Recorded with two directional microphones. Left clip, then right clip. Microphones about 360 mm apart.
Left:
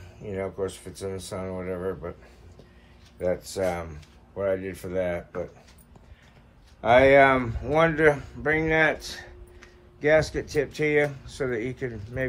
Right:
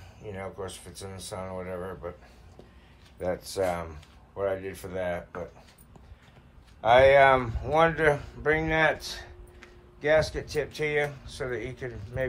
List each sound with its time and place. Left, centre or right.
0.2 s speech: centre
3.2 s speech: centre
6.8 s speech: centre